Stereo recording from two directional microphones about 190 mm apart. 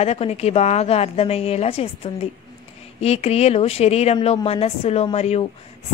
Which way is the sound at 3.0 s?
35° left (ahead or behind).